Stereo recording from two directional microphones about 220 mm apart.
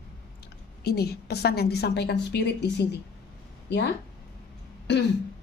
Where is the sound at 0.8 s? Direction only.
45° left (ahead or behind).